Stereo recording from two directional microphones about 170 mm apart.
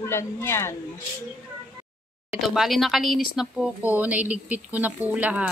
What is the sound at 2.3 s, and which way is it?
Speech, 5° right (ahead or behind).